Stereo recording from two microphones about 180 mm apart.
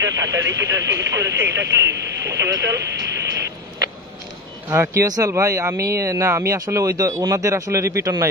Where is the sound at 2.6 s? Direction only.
70° right (ahead or behind).